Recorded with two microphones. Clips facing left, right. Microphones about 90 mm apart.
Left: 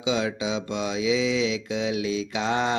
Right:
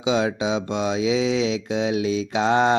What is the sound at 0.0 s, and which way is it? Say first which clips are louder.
Speech: right 4 dB; 30° right (ahead or behind).